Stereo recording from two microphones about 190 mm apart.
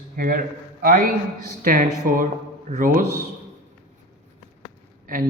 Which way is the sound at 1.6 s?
45° right (ahead or behind).